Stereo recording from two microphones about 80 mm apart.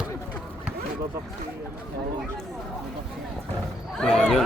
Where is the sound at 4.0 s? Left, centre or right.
Centre.